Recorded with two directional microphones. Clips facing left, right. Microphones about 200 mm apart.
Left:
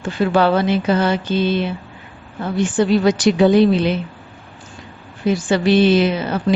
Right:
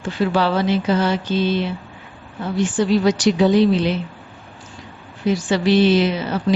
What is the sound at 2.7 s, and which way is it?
Speech, 55° left (ahead or behind).